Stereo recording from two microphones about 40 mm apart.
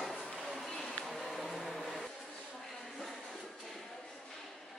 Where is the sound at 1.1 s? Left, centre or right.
Centre.